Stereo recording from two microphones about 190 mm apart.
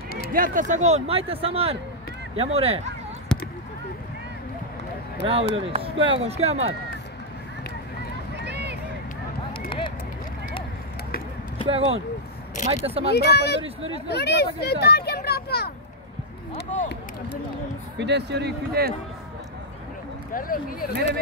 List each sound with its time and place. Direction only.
0.3 s speech: 45° right (ahead or behind)
3.3 s basketball bounce: 5° left (ahead or behind)
5.2 s speech: 30° right (ahead or behind)
8.4 s a sound: 65° right (ahead or behind)
9.7 s a sound: 25° left (ahead or behind)
11.6 s speech: 30° right (ahead or behind)
13.1 s speech: 60° left (ahead or behind)
17.9 s speech: 65° right (ahead or behind)
20.3 s speech: 50° left (ahead or behind)